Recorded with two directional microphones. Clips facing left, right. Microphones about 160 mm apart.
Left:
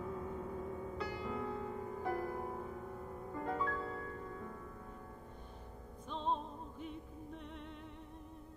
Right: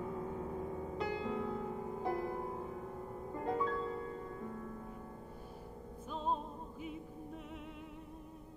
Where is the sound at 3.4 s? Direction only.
20° right (ahead or behind).